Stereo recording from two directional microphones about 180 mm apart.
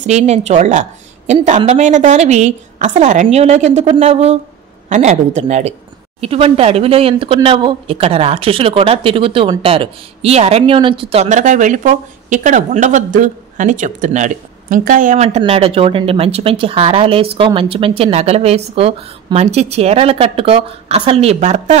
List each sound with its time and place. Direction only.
0.0 s speech: 40° right (ahead or behind)
15.2 s speech: 35° right (ahead or behind)